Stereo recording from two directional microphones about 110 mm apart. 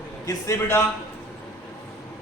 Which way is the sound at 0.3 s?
25° left (ahead or behind).